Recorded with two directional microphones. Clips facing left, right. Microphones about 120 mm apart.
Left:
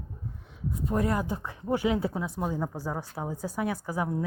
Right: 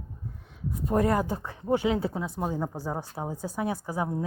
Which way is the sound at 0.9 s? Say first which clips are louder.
Right 4 dB; 50° right (ahead or behind).